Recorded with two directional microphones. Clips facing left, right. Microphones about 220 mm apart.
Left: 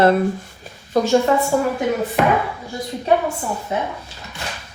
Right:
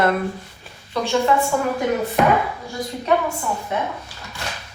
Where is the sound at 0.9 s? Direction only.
45° left (ahead or behind).